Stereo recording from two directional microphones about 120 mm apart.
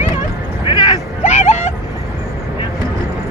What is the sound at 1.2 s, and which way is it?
Vehicle, 65° left (ahead or behind).